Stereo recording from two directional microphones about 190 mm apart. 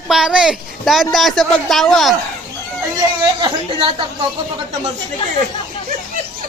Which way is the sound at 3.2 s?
25° right (ahead or behind).